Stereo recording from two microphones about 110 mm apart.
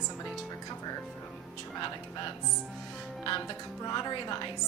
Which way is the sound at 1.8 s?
45° left (ahead or behind).